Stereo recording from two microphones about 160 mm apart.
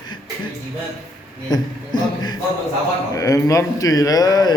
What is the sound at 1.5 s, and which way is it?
A man's voice, 25° left (ahead or behind).